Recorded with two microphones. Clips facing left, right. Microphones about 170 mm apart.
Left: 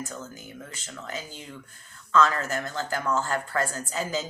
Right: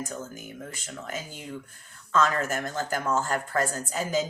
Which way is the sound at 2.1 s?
50° right (ahead or behind).